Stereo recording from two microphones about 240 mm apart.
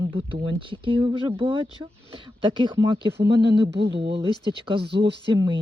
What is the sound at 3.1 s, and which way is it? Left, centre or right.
Speech, right.